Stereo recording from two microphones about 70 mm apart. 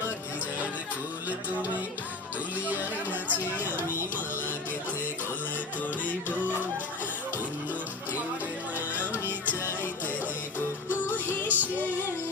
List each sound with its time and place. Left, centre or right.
2.6 s chatter: right
9.1 s music: right
11.0 s music: left
11.4 s music: right